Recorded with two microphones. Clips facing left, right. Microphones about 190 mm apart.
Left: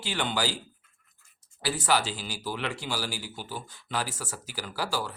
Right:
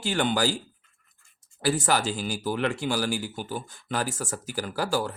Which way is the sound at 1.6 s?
50° right (ahead or behind).